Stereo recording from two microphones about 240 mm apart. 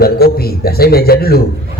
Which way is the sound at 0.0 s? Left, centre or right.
Left.